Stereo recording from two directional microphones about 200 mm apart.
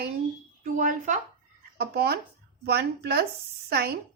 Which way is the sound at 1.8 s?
55° right (ahead or behind).